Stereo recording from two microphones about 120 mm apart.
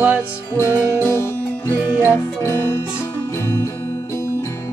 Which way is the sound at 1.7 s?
10° right (ahead or behind).